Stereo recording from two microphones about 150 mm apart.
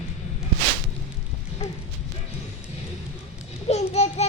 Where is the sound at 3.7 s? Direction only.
45° left (ahead or behind).